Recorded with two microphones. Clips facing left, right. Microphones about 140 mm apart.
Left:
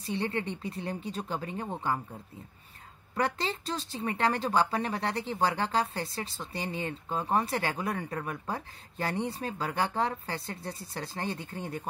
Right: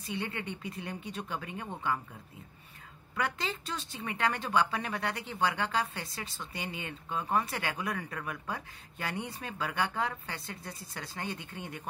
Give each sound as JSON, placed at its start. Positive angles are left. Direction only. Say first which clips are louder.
{"t": 0.0, "sound": "speech", "louder": "left 5 dB", "side_deg": 35}
{"t": 3.2, "sound": "speech", "louder": "left 4 dB", "side_deg": 35}